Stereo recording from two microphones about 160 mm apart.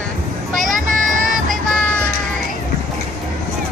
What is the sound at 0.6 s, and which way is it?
Speech, 55° right (ahead or behind).